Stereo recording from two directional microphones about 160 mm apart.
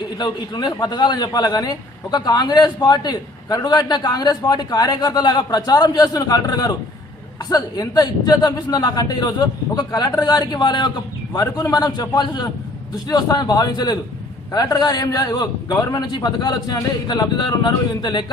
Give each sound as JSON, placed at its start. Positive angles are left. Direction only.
{"t": 0.2, "sound": "a man's voice", "side_deg": 25}